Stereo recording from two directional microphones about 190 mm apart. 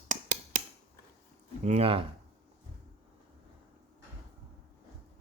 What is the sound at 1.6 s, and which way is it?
Speech, 30° right (ahead or behind).